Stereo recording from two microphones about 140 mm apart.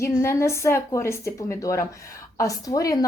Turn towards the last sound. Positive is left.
turn(degrees=25)  # may be behind; listen again after turning